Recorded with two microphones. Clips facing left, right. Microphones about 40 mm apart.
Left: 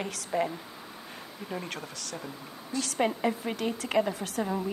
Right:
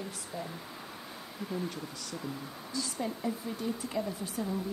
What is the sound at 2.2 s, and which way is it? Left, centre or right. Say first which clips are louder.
Speech: right 1 dB; centre.